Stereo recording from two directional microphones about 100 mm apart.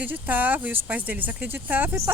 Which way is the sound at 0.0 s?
15° right (ahead or behind).